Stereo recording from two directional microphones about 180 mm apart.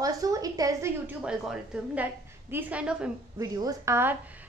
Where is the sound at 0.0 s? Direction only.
20° right (ahead or behind).